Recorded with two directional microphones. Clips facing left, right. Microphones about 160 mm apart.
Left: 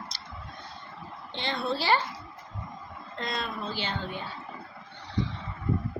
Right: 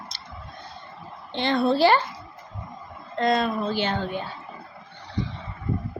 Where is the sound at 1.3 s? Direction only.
55° right (ahead or behind).